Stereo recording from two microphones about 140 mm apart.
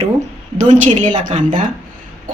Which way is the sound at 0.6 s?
55° right (ahead or behind).